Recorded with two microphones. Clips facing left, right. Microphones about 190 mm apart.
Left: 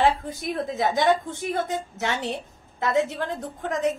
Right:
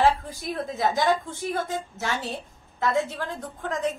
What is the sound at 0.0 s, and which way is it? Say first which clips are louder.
A woman's voice: even; 20° left (ahead or behind).